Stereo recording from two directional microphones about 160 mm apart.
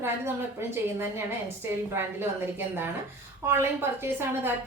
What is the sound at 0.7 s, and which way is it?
A woman's voice, 15° right (ahead or behind).